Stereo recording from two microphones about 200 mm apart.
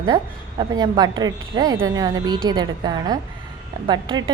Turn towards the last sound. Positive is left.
turn(degrees=-25)  # may be behind; listen again after turning